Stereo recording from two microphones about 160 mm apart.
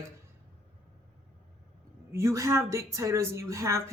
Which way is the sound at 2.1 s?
20° right (ahead or behind).